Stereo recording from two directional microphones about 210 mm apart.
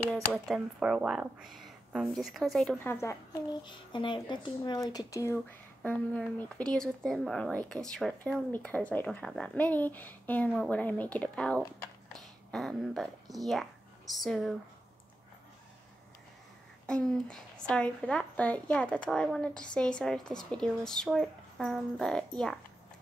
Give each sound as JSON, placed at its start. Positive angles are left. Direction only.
{"t": 0.1, "sound": "speech", "side_deg": 0}
{"t": 3.6, "sound": "speech", "side_deg": 20}
{"t": 16.8, "sound": "speech", "side_deg": 5}